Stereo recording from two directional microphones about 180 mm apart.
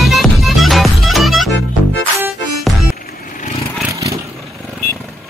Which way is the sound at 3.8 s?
15° right (ahead or behind).